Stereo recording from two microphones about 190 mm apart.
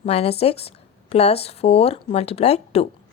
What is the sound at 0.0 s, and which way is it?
Speech, 30° left (ahead or behind).